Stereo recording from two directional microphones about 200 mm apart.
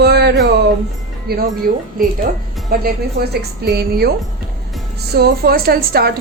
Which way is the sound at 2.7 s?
50° right (ahead or behind).